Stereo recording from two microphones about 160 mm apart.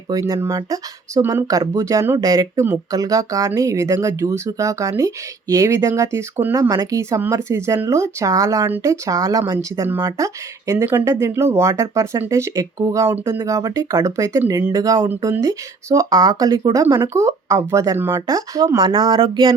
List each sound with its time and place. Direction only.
0.1 s speech: 20° right (ahead or behind)